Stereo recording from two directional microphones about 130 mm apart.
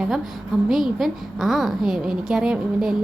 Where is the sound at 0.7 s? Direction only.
Centre (ahead or behind).